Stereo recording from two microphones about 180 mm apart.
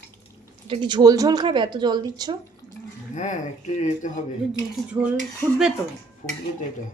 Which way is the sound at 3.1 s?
45° left (ahead or behind).